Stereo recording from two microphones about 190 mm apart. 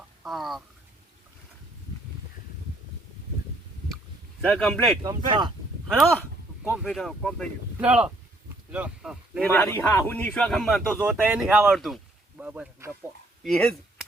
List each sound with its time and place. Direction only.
0.2 s a sound: centre (ahead or behind)
4.4 s a man's voice: 5° left (ahead or behind)
5.0 s speech: 25° right (ahead or behind)
6.7 s speech: centre (ahead or behind)
9.5 s a man's voice: 10° left (ahead or behind); by 12.9 s 10° right (ahead or behind)
13.4 s speech: 5° left (ahead or behind)